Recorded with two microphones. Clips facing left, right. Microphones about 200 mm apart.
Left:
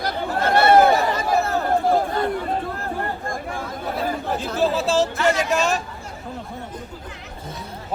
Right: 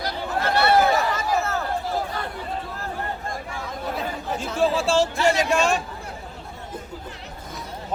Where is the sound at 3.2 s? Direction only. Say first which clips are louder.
Left 4 dB; 50° left (ahead or behind).